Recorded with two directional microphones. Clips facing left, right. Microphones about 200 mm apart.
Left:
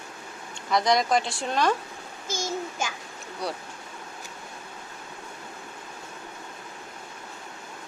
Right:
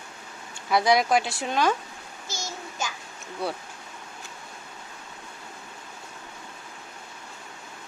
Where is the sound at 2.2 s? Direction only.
50° left (ahead or behind).